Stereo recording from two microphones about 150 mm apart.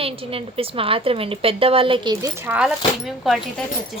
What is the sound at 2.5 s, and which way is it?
Speech, 5° right (ahead or behind).